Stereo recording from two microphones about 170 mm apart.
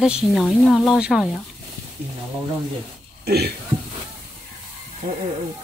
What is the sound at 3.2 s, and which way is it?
Speech, 70° right (ahead or behind).